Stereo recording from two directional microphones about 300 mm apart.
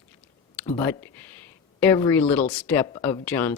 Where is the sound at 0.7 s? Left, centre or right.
Centre.